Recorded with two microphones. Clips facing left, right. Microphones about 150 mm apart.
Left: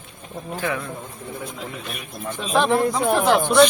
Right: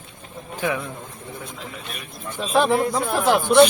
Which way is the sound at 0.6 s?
20° right (ahead or behind).